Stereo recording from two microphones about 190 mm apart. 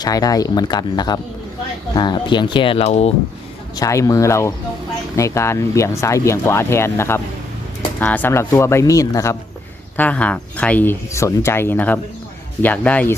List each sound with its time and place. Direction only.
0.0 s speech: 20° left (ahead or behind)
3.8 s speech: 15° left (ahead or behind)